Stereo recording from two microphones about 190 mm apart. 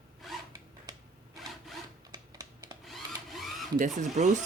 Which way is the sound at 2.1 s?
20° right (ahead or behind).